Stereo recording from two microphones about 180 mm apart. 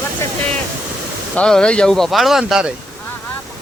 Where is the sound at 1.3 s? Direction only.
5° left (ahead or behind).